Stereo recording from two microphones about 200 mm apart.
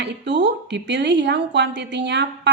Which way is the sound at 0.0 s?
60° right (ahead or behind).